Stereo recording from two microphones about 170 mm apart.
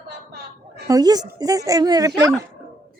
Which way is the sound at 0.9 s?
20° right (ahead or behind).